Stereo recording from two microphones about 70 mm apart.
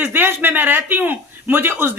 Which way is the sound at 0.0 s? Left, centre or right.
Right.